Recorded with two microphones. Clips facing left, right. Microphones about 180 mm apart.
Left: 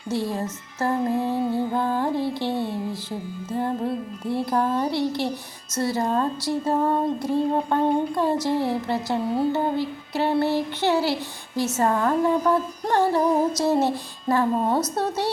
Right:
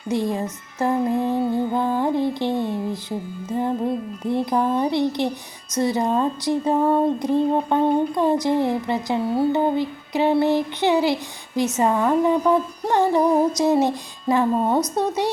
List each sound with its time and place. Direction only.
0.1 s speech: 15° right (ahead or behind)